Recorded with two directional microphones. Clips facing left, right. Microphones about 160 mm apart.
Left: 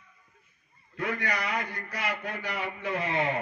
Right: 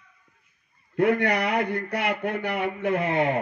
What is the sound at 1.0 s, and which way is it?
Speech, 60° right (ahead or behind).